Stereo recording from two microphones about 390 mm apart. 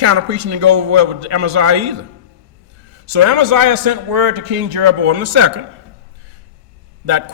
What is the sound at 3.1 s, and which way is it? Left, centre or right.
A man's voice, right.